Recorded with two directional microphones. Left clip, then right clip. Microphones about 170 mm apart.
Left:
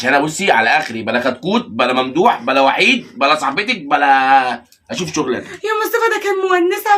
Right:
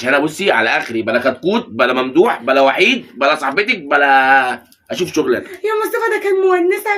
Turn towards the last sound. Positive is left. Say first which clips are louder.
# right 1 dB
turn(degrees=25)  # may be behind; listen again after turning